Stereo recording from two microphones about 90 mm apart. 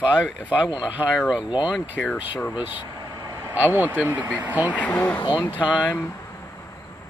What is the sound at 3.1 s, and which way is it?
Vehicle, 40° right (ahead or behind).